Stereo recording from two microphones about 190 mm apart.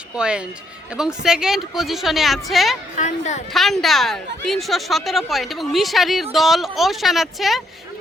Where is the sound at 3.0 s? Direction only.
40° left (ahead or behind).